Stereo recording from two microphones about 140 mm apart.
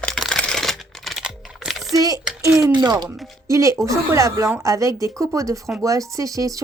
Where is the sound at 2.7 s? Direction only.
30° right (ahead or behind).